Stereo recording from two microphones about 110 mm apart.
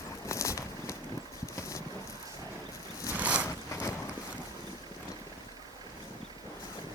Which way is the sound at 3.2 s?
15° right (ahead or behind).